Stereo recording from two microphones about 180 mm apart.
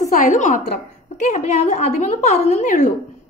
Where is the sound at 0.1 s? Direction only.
45° left (ahead or behind).